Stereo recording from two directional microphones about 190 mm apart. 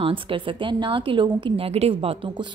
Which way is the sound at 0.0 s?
25° right (ahead or behind).